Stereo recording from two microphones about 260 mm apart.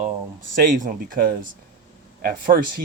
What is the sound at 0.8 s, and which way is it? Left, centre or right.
Speech, right.